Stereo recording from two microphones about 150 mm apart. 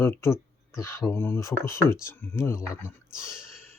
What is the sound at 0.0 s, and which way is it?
Speech, 15° left (ahead or behind).